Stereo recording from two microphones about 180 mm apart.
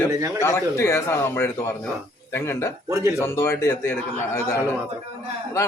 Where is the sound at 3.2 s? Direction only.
15° left (ahead or behind).